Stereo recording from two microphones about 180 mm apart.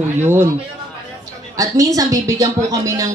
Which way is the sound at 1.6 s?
20° right (ahead or behind).